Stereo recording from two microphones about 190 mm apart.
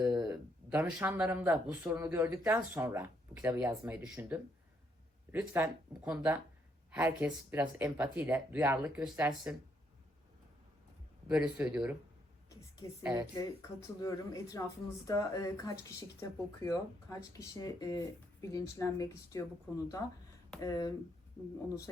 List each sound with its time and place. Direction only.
0.0 s speech: 5° right (ahead or behind)
11.3 s speech: 5° right (ahead or behind)
12.5 s a sound: 15° left (ahead or behind)
13.0 s speech: 10° right (ahead or behind)
13.3 s speech: 20° left (ahead or behind)
20.6 s speech: 20° left (ahead or behind)